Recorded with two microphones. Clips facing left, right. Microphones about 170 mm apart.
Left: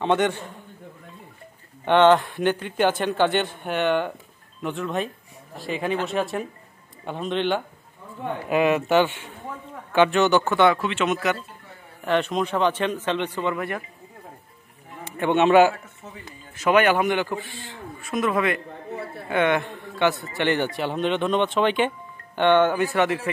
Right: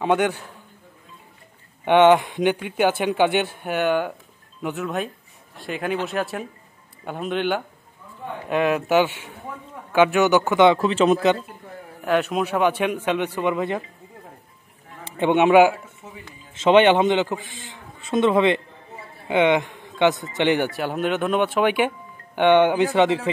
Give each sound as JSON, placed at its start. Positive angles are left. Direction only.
{"t": 0.0, "sound": "speech", "side_deg": -5}
{"t": 1.9, "sound": "speech", "side_deg": -10}
{"t": 10.7, "sound": "a man's voice", "side_deg": -35}
{"t": 12.0, "sound": "speech", "side_deg": -5}
{"t": 15.0, "sound": "a man's voice", "side_deg": -20}
{"t": 16.5, "sound": "a man's voice", "side_deg": -25}